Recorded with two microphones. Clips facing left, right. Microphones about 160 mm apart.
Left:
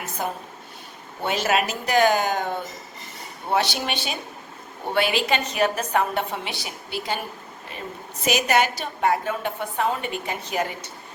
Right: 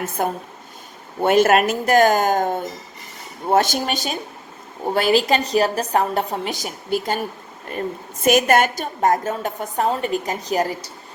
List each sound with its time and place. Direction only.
0.0 s a woman's voice: 50° right (ahead or behind); by 10.9 s 35° right (ahead or behind)